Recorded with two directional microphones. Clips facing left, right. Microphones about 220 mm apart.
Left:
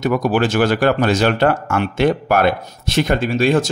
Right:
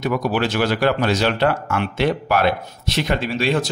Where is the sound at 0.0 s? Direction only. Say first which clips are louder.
Left 4 dB; 45° left (ahead or behind).